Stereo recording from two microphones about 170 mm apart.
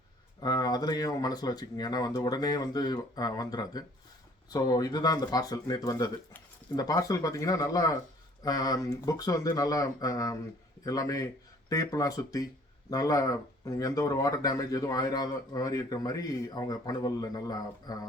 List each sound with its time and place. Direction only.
0.3 s speech: 20° left (ahead or behind)